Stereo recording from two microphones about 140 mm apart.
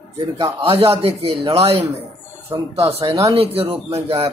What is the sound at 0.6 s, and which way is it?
Speech, 45° right (ahead or behind).